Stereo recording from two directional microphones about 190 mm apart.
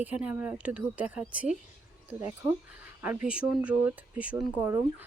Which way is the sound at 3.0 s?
10° right (ahead or behind).